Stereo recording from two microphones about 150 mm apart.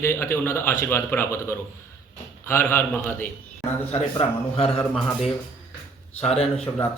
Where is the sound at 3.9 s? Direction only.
35° left (ahead or behind).